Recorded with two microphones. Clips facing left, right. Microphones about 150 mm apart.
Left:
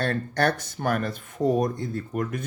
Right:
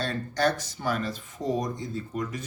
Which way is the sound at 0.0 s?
60° left (ahead or behind).